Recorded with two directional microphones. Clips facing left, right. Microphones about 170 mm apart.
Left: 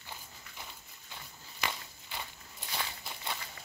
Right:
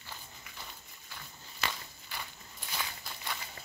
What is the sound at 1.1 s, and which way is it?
Walk, 20° left (ahead or behind).